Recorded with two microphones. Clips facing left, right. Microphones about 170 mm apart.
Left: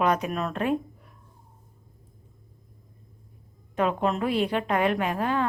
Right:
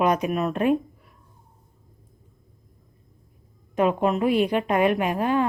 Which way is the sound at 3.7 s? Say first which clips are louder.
Right 4 dB; 15° right (ahead or behind).